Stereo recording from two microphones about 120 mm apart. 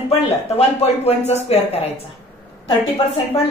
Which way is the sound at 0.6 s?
60° left (ahead or behind).